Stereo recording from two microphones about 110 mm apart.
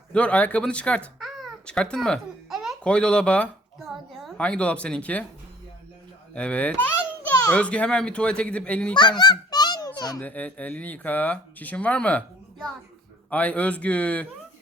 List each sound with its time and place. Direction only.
0.1 s speech: 10° left (ahead or behind)
1.2 s babbling: centre (ahead or behind)
2.8 s speech: 10° left (ahead or behind)
6.3 s speech: 10° left (ahead or behind)
9.1 s a sound: 40° left (ahead or behind)
10.2 s speech: 15° left (ahead or behind)